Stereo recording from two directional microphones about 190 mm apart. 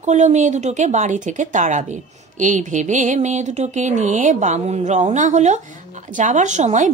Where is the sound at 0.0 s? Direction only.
40° right (ahead or behind).